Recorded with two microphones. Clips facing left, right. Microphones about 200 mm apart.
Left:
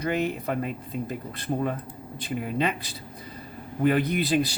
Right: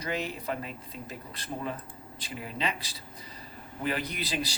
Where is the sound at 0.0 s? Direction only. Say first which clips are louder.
Left 7 dB; 55° left (ahead or behind).